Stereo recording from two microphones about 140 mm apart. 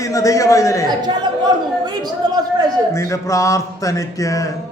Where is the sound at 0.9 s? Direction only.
30° right (ahead or behind).